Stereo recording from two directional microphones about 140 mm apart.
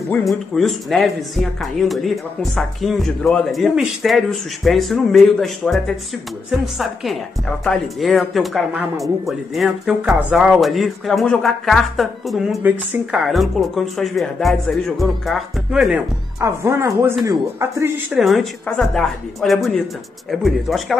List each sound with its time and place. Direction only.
0.2 s speech: centre (ahead or behind)
16.3 s speech: 20° right (ahead or behind)
18.1 s speech: centre (ahead or behind)